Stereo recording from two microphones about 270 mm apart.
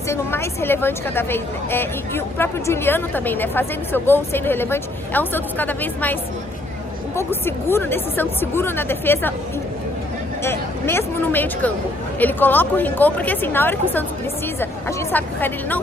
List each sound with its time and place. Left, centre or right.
0.1 s speech: centre
7.2 s speech: centre
10.4 s speech: centre